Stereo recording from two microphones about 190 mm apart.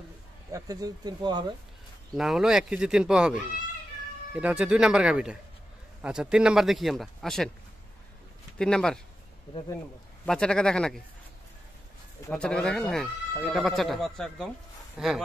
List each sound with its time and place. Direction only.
0.5 s speech: 20° right (ahead or behind)
2.1 s speech: centre (ahead or behind)
8.5 s speech: 5° left (ahead or behind)
10.2 s speech: 5° left (ahead or behind)
12.3 s speech: 5° left (ahead or behind)